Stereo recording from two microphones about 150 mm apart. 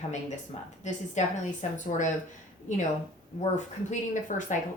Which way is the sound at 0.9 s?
55° left (ahead or behind).